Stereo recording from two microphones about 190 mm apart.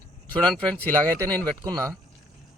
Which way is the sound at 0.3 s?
5° left (ahead or behind).